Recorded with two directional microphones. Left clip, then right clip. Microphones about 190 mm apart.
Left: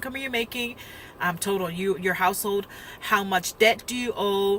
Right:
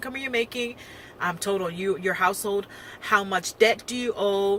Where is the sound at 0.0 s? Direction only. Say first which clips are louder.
Right 1 dB; 15° left (ahead or behind).